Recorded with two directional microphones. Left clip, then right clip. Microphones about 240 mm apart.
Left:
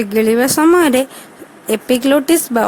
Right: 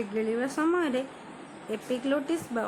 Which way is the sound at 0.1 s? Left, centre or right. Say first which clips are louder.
Left 18 dB; left.